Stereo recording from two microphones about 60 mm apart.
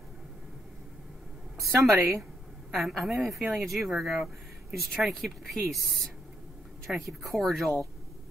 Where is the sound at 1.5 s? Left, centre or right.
Right.